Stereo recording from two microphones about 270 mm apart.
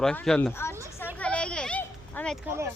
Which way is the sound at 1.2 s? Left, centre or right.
Centre.